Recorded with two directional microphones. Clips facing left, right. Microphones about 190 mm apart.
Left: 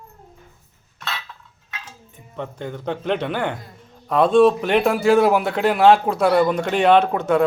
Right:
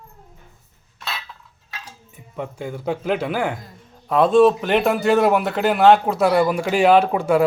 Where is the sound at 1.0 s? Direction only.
5° right (ahead or behind).